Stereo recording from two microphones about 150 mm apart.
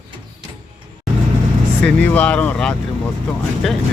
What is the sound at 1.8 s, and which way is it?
Speech, 10° left (ahead or behind).